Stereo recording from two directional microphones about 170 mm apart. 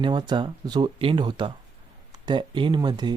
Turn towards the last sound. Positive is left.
turn(degrees=-25)  # may be behind; listen again after turning